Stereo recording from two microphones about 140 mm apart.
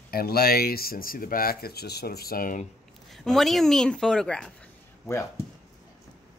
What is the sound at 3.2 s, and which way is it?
A woman's voice, centre (ahead or behind).